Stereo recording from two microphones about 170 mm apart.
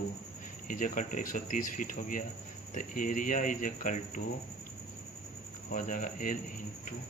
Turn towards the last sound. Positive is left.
turn(degrees=50)  # may be behind; listen again after turning